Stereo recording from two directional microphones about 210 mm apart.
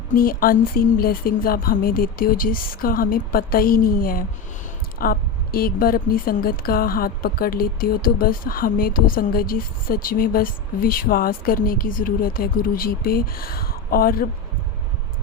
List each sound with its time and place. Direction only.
0.2 s a woman's voice: 45° left (ahead or behind)